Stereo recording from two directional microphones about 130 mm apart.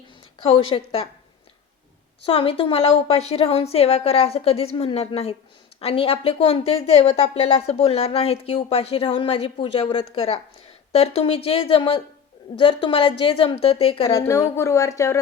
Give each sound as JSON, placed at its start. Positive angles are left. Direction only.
{"t": 0.4, "sound": "a woman's voice", "side_deg": 45}
{"t": 2.2, "sound": "a woman's voice", "side_deg": 45}
{"t": 14.2, "sound": "speech", "side_deg": 25}